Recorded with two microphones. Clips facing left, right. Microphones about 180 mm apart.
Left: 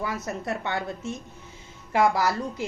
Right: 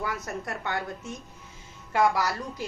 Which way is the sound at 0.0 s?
25° left (ahead or behind).